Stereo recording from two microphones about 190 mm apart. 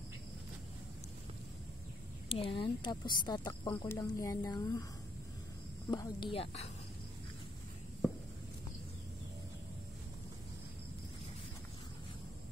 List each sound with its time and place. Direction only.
2.2 s speech: 30° left (ahead or behind)
5.9 s speech: 20° left (ahead or behind)
8.0 s walk: centre (ahead or behind)